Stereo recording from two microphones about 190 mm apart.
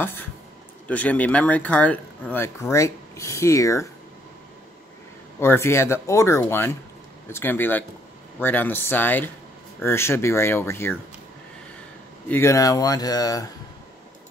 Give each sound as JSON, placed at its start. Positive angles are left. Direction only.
{"t": 0.8, "sound": "speech", "side_deg": 10}
{"t": 5.4, "sound": "speech", "side_deg": 15}
{"t": 12.3, "sound": "speech", "side_deg": 15}